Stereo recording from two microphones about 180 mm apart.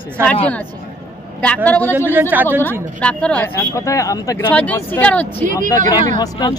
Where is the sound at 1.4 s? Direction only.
10° left (ahead or behind).